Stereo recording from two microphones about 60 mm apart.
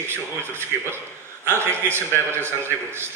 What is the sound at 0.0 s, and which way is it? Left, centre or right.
A man's voice, right.